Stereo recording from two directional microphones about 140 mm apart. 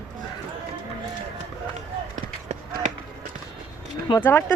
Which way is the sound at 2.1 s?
65° right (ahead or behind).